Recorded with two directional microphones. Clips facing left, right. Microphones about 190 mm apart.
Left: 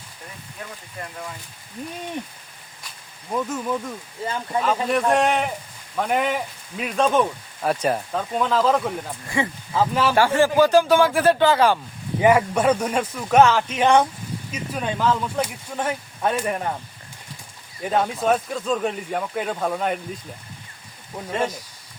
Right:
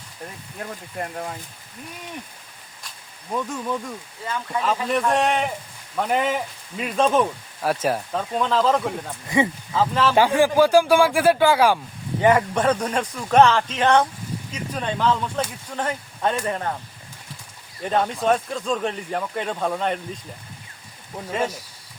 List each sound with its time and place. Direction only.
0.9 s speech: 45° right (ahead or behind)
3.3 s speech: 5° left (ahead or behind)
4.3 s speech: 30° left (ahead or behind)
4.6 s speech: centre (ahead or behind)
9.3 s speech: 20° right (ahead or behind)
9.7 s speech: 10° left (ahead or behind)
10.2 s speech: 15° right (ahead or behind)
12.2 s speech: 10° left (ahead or behind)
17.8 s speech: 5° left (ahead or behind)
21.2 s speech: 5° right (ahead or behind)